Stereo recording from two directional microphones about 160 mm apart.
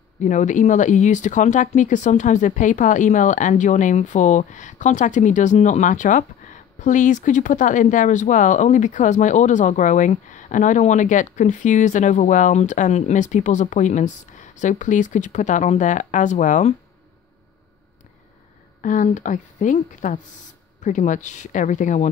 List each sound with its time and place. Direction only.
0.2 s speech: 50° left (ahead or behind)
18.8 s speech: 55° left (ahead or behind)